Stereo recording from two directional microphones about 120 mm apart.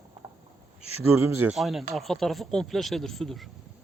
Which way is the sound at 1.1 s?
20° right (ahead or behind).